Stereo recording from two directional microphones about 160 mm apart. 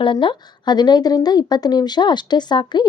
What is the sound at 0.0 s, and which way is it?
A woman's voice, 30° left (ahead or behind).